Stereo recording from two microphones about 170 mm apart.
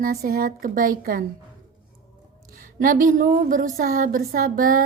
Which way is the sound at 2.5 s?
55° right (ahead or behind).